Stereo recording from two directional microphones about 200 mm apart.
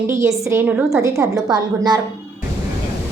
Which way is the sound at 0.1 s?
15° right (ahead or behind).